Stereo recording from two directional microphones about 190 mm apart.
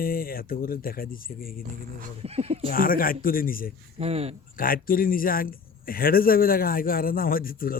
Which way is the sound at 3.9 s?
30° right (ahead or behind).